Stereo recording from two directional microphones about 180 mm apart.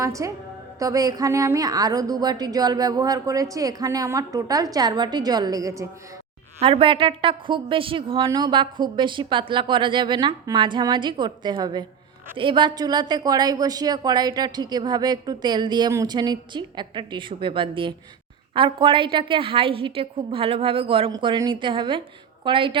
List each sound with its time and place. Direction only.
0.0 s a woman's voice: 15° right (ahead or behind)
6.6 s a woman's voice: 30° right (ahead or behind)